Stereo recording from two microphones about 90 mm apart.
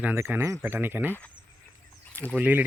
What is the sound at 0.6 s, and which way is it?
Speech, 20° right (ahead or behind).